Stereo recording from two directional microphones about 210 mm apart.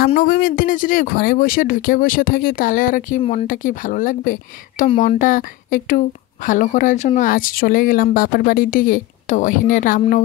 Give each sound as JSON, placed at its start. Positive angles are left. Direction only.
{"t": 0.0, "sound": "speech", "side_deg": 45}